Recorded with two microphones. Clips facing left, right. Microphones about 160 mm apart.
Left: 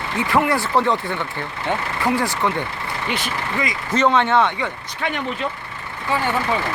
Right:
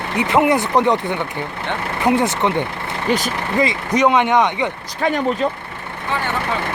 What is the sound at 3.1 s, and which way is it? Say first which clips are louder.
Speech: right 7 dB; 40° right (ahead or behind).